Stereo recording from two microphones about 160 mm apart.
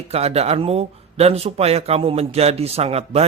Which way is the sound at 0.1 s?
40° right (ahead or behind).